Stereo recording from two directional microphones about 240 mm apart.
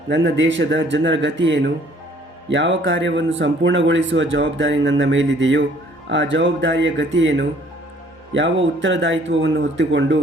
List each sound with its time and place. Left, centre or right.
0.1 s a man's voice: right